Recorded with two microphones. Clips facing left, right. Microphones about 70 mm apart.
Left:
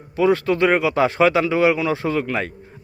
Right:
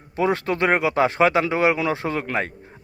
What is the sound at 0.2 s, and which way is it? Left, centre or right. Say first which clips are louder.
Speech: left 4 dB; right.